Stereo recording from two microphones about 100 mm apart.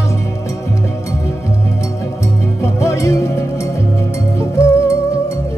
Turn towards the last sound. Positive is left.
turn(degrees=30)  # may be behind; listen again after turning